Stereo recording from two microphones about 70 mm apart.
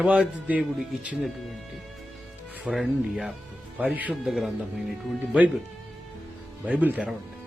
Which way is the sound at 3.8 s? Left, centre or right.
Centre.